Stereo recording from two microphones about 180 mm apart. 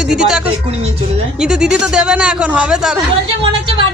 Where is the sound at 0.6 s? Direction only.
35° right (ahead or behind).